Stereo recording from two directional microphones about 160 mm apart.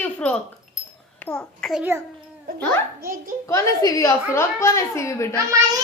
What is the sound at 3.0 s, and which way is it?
Speech, 60° right (ahead or behind).